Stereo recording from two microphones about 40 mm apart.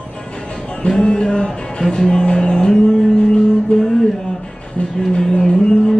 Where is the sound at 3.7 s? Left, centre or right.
Centre.